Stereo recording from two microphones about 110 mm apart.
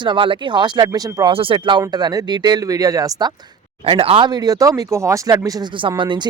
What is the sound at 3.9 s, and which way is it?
Speech, 55° right (ahead or behind).